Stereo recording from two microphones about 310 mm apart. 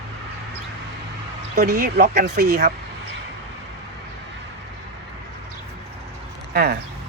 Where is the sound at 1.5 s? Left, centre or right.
Right.